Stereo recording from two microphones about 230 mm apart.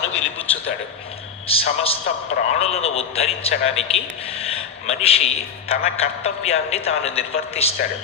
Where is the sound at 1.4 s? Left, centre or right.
Left.